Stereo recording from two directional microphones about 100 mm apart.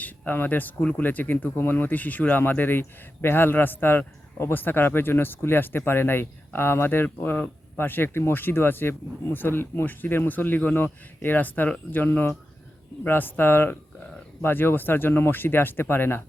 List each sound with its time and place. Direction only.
0.0 s speech: 20° left (ahead or behind)